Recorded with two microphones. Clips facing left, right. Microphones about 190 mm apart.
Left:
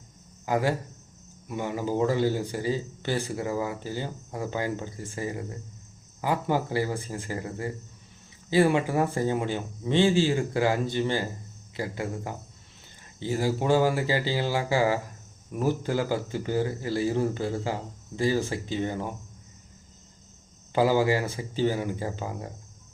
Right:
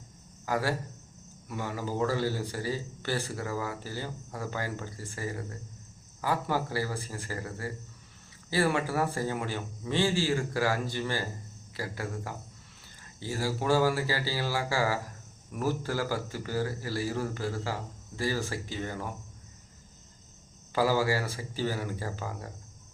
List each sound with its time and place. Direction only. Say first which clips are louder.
0.4 s speech: left 4 dB; 20° left (ahead or behind)
20.7 s speech: left 4 dB; 20° left (ahead or behind)